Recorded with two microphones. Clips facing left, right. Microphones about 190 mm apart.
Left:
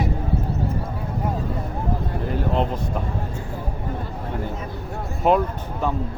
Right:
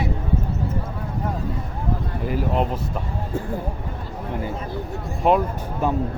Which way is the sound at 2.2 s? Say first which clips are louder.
Right 1 dB; 5° right (ahead or behind).